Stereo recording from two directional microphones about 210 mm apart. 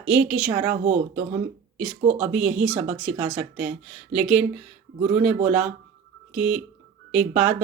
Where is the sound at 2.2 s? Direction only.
5° right (ahead or behind).